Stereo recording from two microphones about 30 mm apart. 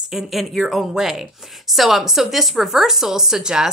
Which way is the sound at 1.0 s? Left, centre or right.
Centre.